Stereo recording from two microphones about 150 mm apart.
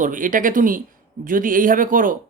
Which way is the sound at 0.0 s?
60° right (ahead or behind).